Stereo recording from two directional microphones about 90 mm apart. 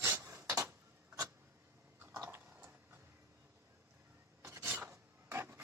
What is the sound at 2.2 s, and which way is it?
Mechanisms, 25° right (ahead or behind).